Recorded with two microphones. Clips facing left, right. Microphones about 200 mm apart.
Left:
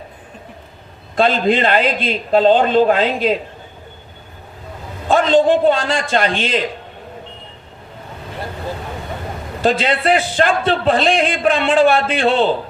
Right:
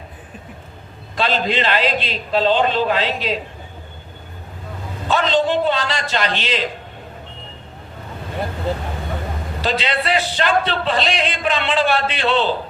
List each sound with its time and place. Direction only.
1.1 s a man's voice: 50° left (ahead or behind)
5.0 s a man's voice: 50° left (ahead or behind)
9.6 s a man's voice: 50° left (ahead or behind)